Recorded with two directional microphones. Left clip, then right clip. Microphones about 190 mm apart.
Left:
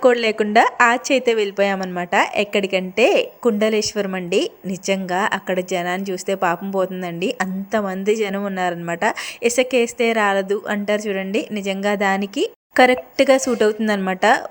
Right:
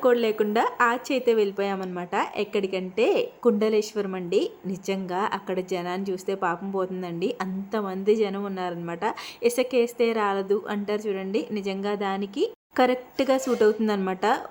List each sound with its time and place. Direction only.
0.0 s speech: 15° left (ahead or behind)